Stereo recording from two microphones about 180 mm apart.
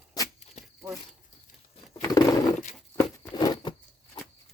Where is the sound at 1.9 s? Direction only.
20° left (ahead or behind).